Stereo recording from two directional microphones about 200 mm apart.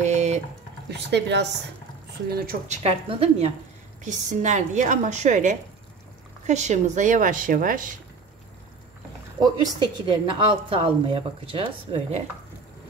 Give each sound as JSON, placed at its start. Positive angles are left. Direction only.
{"t": 0.0, "sound": "typing", "side_deg": -35}
{"t": 0.8, "sound": "speech", "side_deg": -60}
{"t": 2.3, "sound": "a woman's voice", "side_deg": -45}
{"t": 2.8, "sound": "a woman's voice", "side_deg": -30}
{"t": 9.4, "sound": "a woman's voice", "side_deg": -20}